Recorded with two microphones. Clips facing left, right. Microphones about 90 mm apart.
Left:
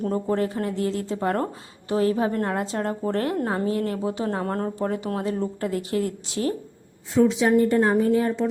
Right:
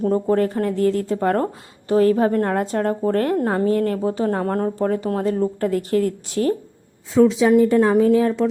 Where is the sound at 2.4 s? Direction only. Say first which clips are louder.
Right 5 dB; 45° right (ahead or behind).